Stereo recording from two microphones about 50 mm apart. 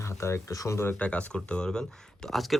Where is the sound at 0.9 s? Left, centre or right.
Left.